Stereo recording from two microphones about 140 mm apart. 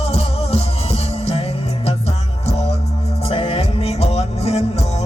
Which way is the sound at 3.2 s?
45° left (ahead or behind).